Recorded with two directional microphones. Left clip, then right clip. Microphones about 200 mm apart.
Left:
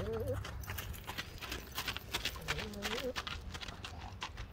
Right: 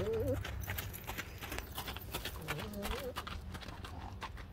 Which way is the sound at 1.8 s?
5° right (ahead or behind).